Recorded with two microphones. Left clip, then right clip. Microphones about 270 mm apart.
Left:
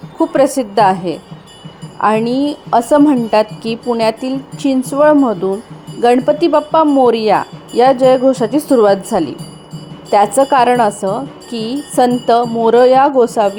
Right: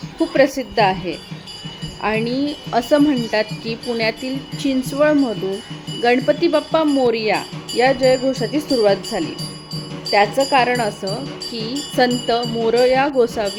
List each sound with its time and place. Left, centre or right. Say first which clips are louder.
0.2 s a woman's voice: left 4 dB; centre
6.4 s a woman's voice: left 6 dB; centre